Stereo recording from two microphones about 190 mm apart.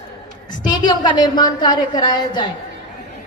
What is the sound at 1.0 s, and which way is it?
A woman's voice, 25° left (ahead or behind).